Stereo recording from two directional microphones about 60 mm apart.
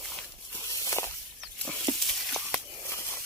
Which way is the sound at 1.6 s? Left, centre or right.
Centre.